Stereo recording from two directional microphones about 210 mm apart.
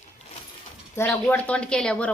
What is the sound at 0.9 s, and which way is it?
A woman's voice, 5° left (ahead or behind).